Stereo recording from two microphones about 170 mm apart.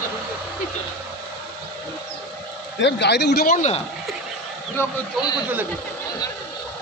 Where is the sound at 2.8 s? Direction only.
90° left; by 3.5 s 70° left (ahead or behind).